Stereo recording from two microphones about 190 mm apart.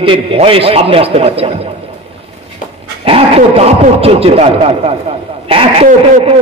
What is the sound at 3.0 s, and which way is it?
A man's voice, 30° right (ahead or behind).